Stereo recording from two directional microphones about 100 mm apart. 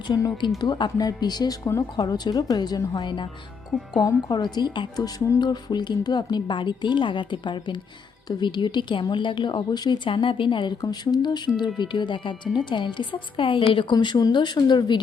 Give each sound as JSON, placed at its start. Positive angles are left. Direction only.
{"t": 0.1, "sound": "a woman's voice", "side_deg": 50}
{"t": 5.4, "sound": "a woman's voice", "side_deg": 45}
{"t": 13.9, "sound": "a woman's voice", "side_deg": 45}